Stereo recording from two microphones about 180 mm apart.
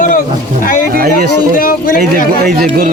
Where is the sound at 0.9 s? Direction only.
55° right (ahead or behind).